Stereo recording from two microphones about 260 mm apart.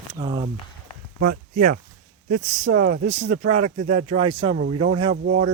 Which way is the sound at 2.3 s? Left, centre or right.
Right.